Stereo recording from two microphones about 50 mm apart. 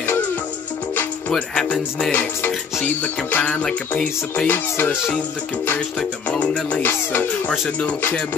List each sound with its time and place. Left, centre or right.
1.5 s music: centre
2.1 s music: left
3.9 s music: left
6.8 s music: left